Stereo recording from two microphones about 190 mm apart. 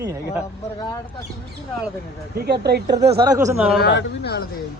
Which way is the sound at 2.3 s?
55° right (ahead or behind).